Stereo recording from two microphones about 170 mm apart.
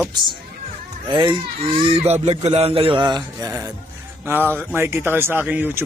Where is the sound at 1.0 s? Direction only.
25° right (ahead or behind).